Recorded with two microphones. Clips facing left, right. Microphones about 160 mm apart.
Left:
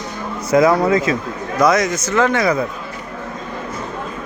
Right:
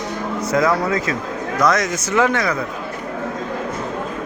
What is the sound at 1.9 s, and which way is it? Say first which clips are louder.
Speech: left 1 dB; 10° right (ahead or behind).